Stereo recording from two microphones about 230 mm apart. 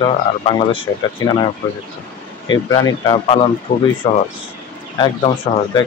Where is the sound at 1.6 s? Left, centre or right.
Centre.